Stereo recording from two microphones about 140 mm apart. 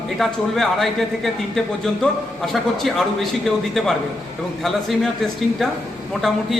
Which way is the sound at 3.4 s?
Centre (ahead or behind).